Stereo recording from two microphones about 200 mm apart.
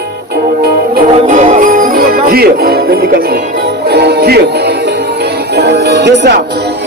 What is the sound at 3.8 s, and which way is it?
Music, 55° right (ahead or behind).